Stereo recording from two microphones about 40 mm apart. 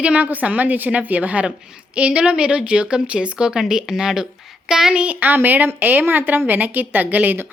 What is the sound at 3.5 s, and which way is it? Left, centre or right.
A woman's voice, centre.